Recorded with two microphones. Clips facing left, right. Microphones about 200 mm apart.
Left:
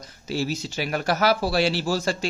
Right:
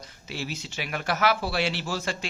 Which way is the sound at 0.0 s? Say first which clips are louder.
Left 8 dB; 40° left (ahead or behind).